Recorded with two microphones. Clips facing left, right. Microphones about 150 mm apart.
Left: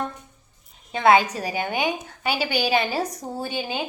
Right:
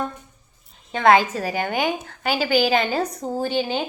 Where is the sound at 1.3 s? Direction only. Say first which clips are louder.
Right 3 dB; 15° left (ahead or behind).